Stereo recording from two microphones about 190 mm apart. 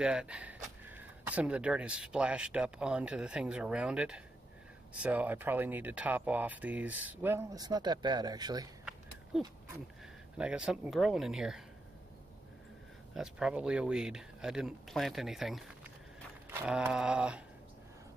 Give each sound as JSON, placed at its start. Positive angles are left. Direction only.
{"t": 0.0, "sound": "speech", "side_deg": -5}
{"t": 10.3, "sound": "speech", "side_deg": -5}
{"t": 13.1, "sound": "speech", "side_deg": -5}